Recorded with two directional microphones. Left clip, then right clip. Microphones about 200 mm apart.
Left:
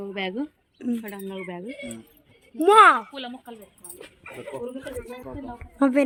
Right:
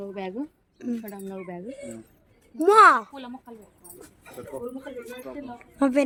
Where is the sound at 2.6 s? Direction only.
Centre (ahead or behind).